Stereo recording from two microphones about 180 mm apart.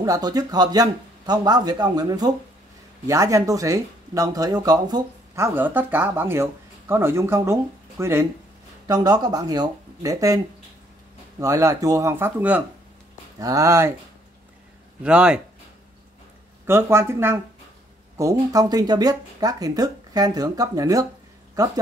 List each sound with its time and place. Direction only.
0.0 s speech: 20° right (ahead or behind)
15.0 s speech: 5° right (ahead or behind)
16.6 s speech: 15° right (ahead or behind)